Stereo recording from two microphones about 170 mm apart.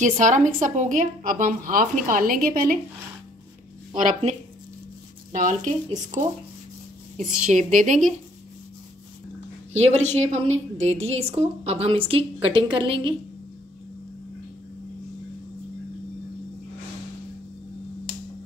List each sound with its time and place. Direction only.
0.0 s a woman's voice: 45° right (ahead or behind)
4.1 s a woman's voice: 45° right (ahead or behind)
7.4 s a woman's voice: 45° right (ahead or behind)
9.8 s a woman's voice: 40° right (ahead or behind)